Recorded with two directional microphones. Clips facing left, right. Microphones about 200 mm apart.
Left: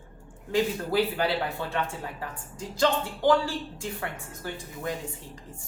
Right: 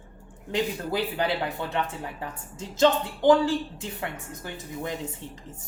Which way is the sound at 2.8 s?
20° right (ahead or behind).